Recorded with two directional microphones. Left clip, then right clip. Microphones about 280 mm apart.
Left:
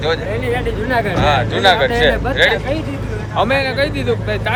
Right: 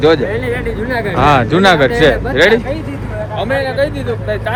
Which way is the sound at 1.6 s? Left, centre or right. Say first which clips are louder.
Right 1 dB; right.